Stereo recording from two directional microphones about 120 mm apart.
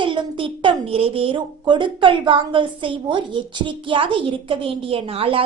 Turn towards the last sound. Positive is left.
turn(degrees=-50)  # may be behind; listen again after turning